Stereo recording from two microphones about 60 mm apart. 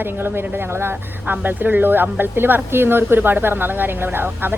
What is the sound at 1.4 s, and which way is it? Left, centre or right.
A woman's voice, right.